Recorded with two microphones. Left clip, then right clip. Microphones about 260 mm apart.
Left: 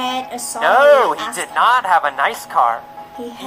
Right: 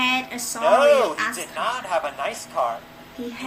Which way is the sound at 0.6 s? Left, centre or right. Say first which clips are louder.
Left 5 dB; left.